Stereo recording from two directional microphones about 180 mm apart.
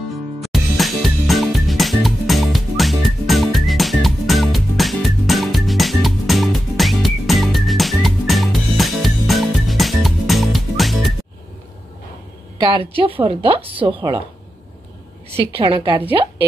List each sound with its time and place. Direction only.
0.4 s music: centre (ahead or behind)
13.0 s a woman's voice: 30° right (ahead or behind)
15.5 s a woman's voice: 25° right (ahead or behind)